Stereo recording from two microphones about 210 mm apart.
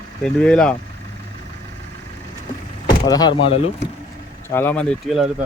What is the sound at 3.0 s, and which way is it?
Speech, 20° left (ahead or behind).